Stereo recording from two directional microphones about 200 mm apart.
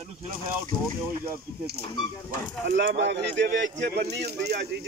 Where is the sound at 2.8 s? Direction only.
60° right (ahead or behind).